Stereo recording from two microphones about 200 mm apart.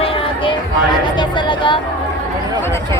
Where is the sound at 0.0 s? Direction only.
25° left (ahead or behind).